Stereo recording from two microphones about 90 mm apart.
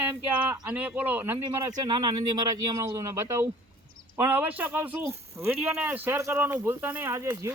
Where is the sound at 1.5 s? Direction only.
45° right (ahead or behind).